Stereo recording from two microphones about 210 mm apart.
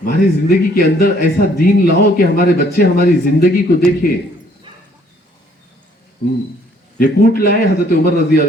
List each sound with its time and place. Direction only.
0.0 s speech: 45° left (ahead or behind)
7.0 s speech: 45° left (ahead or behind)